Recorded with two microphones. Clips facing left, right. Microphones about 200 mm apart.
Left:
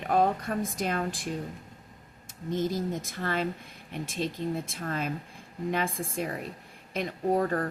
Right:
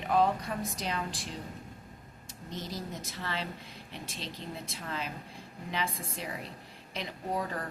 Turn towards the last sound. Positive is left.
turn(degrees=50)  # may be behind; listen again after turning